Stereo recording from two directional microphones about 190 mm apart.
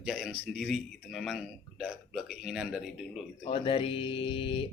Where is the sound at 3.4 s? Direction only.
30° left (ahead or behind).